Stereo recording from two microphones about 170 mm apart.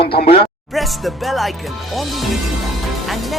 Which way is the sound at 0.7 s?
Centre (ahead or behind).